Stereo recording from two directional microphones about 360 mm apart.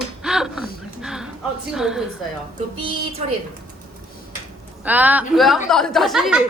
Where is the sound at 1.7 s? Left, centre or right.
Centre.